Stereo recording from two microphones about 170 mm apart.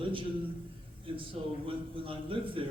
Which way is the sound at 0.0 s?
30° right (ahead or behind).